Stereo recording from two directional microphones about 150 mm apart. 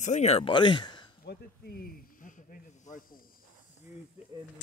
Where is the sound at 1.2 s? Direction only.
90° left; by 3.1 s 60° left (ahead or behind).